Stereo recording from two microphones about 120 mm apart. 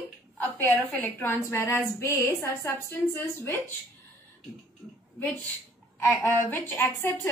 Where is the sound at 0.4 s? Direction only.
15° left (ahead or behind).